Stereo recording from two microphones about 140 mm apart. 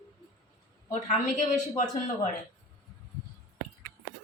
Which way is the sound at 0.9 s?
55° left (ahead or behind).